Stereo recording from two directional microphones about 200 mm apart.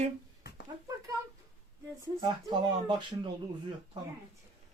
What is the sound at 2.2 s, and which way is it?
Speech, 20° right (ahead or behind).